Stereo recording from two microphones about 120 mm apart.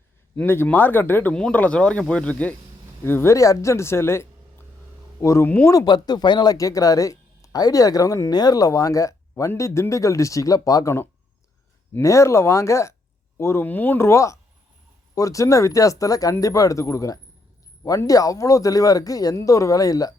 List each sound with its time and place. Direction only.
0.3 s speech: 20° left (ahead or behind)
5.5 s speech: 15° left (ahead or behind)
5.7 s speech: 35° left (ahead or behind)